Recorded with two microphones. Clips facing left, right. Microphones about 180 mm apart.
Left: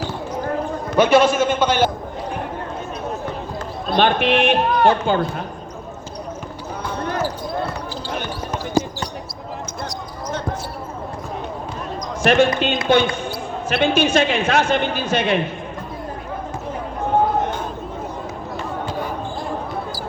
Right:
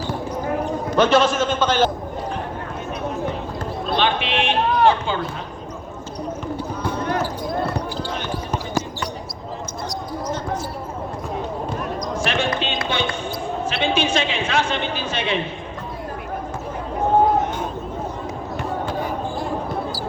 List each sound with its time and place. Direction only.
0.9 s a man's voice: 10° left (ahead or behind)
3.9 s speech: 50° left (ahead or behind)
8.8 s basketball bounce: 15° left (ahead or behind)
12.2 s speech: 45° left (ahead or behind)